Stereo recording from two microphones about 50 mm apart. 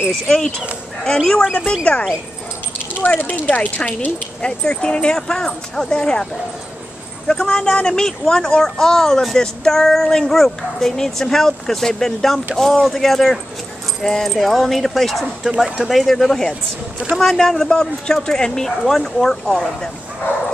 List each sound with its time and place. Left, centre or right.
0.1 s speech: centre
1.9 s speech: left
3.2 s speech: left; by 6.2 s centre
7.2 s speech: centre
15.4 s speech: centre